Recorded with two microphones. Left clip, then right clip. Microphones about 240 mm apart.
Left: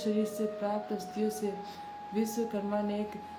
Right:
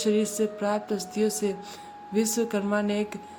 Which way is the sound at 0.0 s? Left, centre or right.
Right.